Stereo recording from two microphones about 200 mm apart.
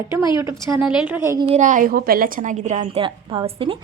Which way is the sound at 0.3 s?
15° right (ahead or behind).